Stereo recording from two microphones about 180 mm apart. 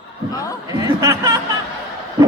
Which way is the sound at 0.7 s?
20° right (ahead or behind).